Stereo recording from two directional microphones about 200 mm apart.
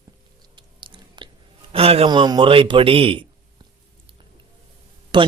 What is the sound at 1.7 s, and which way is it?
A man's voice, 30° right (ahead or behind).